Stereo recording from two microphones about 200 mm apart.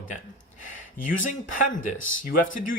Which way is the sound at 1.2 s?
40° left (ahead or behind).